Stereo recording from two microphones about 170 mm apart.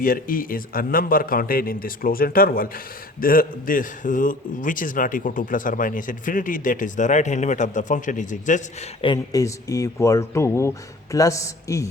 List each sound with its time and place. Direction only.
0.0 s a man's voice: 55° left (ahead or behind)
9.0 s speech: 30° left (ahead or behind)
9.4 s speech: 20° left (ahead or behind)